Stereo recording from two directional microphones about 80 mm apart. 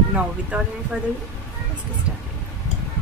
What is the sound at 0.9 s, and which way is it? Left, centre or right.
Speech, centre.